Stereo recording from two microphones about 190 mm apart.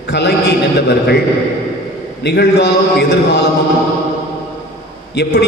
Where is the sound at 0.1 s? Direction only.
65° left (ahead or behind).